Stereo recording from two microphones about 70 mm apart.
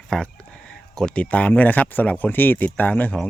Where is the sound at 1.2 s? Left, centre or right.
Left.